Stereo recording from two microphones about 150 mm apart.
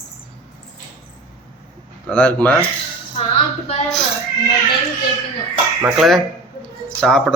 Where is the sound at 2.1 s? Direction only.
10° left (ahead or behind).